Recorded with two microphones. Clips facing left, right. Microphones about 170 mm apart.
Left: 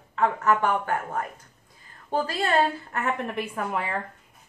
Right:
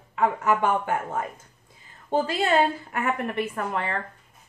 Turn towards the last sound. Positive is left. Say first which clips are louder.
# even
turn(degrees=5)  # may be behind; listen again after turning